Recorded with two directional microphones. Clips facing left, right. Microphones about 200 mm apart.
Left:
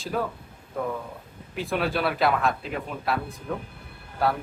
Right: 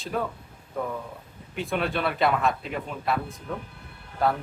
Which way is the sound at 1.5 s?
Centre (ahead or behind).